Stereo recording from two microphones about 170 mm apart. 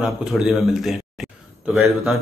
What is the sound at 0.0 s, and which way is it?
Speech, 5° right (ahead or behind).